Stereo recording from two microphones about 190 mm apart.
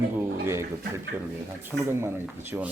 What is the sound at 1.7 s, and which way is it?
Speech, 15° right (ahead or behind).